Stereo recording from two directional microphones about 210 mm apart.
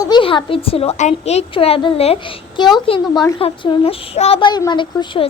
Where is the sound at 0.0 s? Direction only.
20° left (ahead or behind).